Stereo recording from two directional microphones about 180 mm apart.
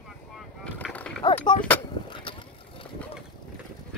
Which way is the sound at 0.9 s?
10° left (ahead or behind).